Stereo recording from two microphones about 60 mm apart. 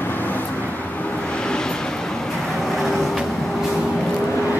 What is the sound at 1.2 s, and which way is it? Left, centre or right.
Vehicle, centre.